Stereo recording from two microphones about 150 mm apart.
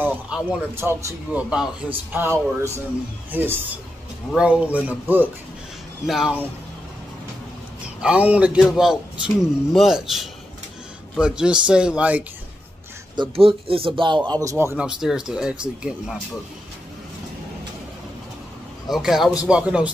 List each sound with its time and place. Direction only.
0.0 s a sound: 10° right (ahead or behind)
0.5 s speech: 15° right (ahead or behind)
8.0 s speech: 10° right (ahead or behind)
13.1 s speech: 30° right (ahead or behind)
14.8 s speech: 5° right (ahead or behind)
18.9 s speech: centre (ahead or behind)